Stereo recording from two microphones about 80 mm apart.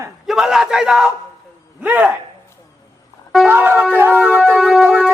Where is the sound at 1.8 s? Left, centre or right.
Centre.